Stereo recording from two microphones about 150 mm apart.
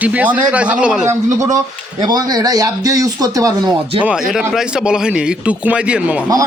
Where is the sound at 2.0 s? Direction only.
25° right (ahead or behind).